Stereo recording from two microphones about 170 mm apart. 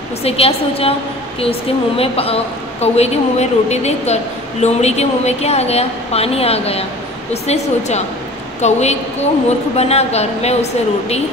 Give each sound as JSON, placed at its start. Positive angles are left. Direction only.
{"t": 0.2, "sound": "a woman's voice", "side_deg": 35}